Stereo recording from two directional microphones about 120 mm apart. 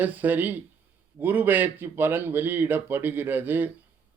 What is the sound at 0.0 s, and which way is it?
Speech, 15° right (ahead or behind).